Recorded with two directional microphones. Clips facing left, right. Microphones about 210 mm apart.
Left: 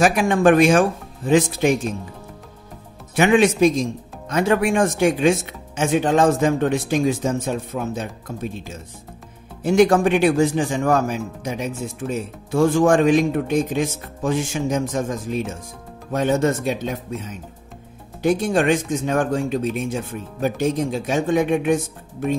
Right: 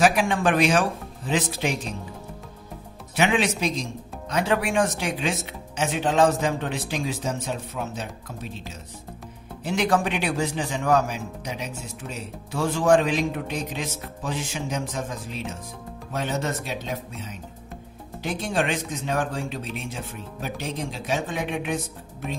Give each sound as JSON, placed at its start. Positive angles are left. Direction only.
{"t": 0.0, "sound": "a man's voice", "side_deg": 45}
{"t": 3.2, "sound": "a man's voice", "side_deg": 50}
{"t": 18.5, "sound": "a man's voice", "side_deg": 45}